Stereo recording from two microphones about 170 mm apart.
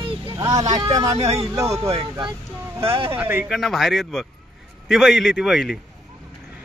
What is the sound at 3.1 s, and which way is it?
Speech, 10° right (ahead or behind).